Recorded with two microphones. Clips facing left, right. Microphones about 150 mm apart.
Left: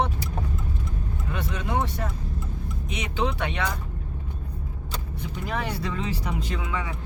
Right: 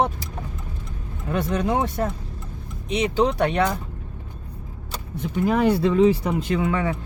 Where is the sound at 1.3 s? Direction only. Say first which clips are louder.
Right 7 dB; 45° right (ahead or behind).